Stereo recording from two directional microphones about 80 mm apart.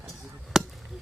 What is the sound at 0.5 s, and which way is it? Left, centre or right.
Chop, centre.